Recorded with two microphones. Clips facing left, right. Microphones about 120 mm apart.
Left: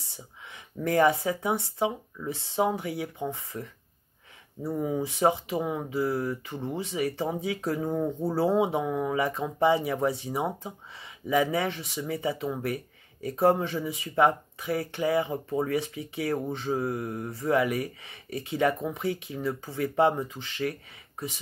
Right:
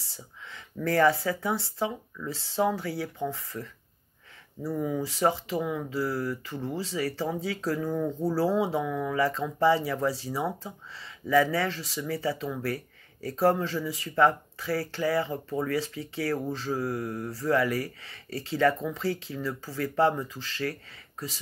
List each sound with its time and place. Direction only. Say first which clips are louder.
0.0 s speech: even; 20° left (ahead or behind)